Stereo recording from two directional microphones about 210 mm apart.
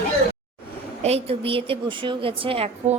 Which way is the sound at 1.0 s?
30° right (ahead or behind).